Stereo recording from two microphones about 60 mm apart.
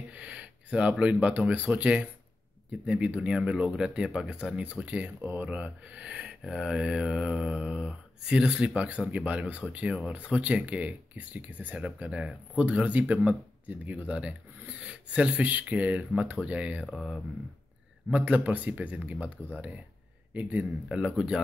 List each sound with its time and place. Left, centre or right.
0.1 s speech: right
6.4 s speech: centre
8.7 s speech: right
18.1 s speech: right
19.2 s speech: left
20.3 s speech: right
20.9 s speech: centre